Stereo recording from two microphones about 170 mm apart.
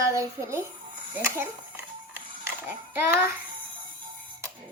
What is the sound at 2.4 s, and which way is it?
Speech, 15° right (ahead or behind).